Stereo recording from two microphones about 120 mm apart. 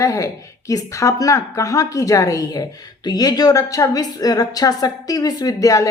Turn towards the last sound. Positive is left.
turn(degrees=30)  # may be behind; listen again after turning